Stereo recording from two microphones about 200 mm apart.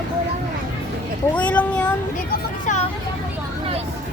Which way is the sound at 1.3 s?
5° left (ahead or behind).